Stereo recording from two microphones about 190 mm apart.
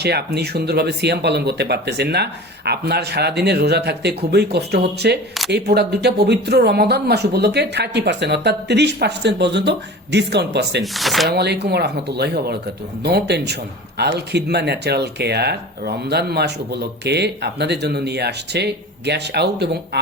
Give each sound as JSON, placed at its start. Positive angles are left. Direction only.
{"t": 0.0, "sound": "speech", "side_deg": -60}
{"t": 10.9, "sound": "speech", "side_deg": 0}
{"t": 11.3, "sound": "speech", "side_deg": -60}